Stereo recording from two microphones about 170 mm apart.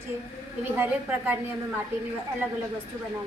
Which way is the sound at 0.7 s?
10° right (ahead or behind).